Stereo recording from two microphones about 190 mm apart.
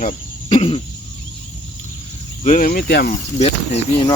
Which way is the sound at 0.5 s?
30° left (ahead or behind).